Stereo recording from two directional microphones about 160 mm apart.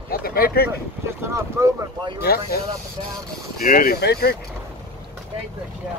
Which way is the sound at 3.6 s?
60° left (ahead or behind).